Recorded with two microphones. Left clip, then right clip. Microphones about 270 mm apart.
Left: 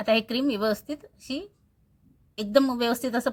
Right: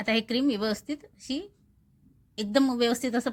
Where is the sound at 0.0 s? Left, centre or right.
Centre.